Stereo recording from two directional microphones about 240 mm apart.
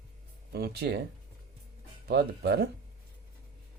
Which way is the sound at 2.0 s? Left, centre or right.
Right.